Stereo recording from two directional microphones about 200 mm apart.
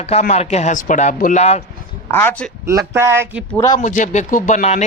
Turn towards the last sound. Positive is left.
turn(degrees=35)  # may be behind; listen again after turning